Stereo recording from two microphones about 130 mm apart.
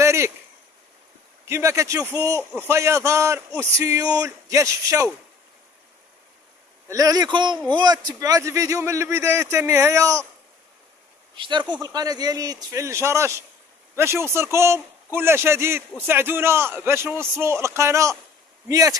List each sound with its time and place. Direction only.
0.0 s a sound: 20° right (ahead or behind)
1.5 s a man's voice: 20° right (ahead or behind)
6.9 s a man's voice: 30° right (ahead or behind)
11.3 s a man's voice: 40° right (ahead or behind)